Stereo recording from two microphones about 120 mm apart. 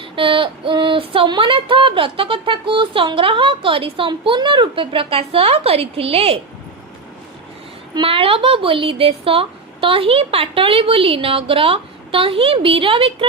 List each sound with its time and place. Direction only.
0.0 s speech: 45° right (ahead or behind)
7.9 s speech: 50° right (ahead or behind)